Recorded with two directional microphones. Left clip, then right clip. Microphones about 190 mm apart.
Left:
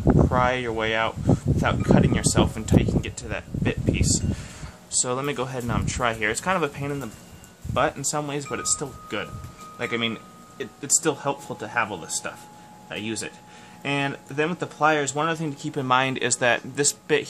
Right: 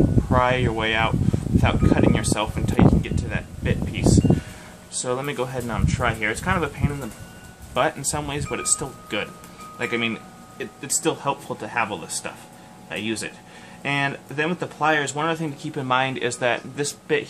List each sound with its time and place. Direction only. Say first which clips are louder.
0.3 s speech: right 2 dB; 35° left (ahead or behind)
7.7 s speech: right 1 dB; 30° left (ahead or behind)
9.8 s speech: right 2 dB; 35° left (ahead or behind)